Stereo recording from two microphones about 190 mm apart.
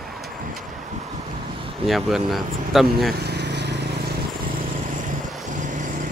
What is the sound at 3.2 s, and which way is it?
Vehicle, 60° right (ahead or behind).